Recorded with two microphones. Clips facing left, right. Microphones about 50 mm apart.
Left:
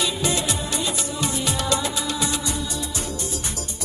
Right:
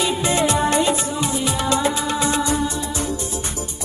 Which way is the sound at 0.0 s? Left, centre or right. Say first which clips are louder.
Right 5 dB; right.